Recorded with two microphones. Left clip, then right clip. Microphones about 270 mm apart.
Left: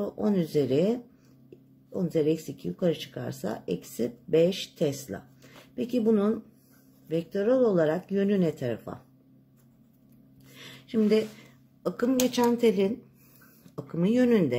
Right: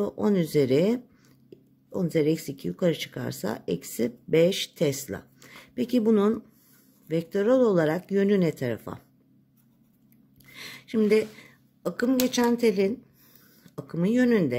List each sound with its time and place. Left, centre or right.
0.0 s speech: right
10.5 s a sound: right
11.8 s speech: right